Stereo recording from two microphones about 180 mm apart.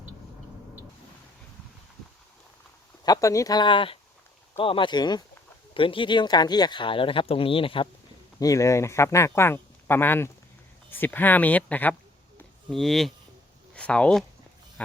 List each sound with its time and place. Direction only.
3.0 s speech: 20° left (ahead or behind)
8.4 s speech: 20° left (ahead or behind)